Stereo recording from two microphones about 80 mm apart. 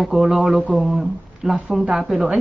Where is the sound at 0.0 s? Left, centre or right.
Centre.